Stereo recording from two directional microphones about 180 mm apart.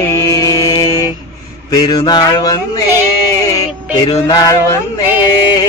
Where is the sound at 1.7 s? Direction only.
25° left (ahead or behind).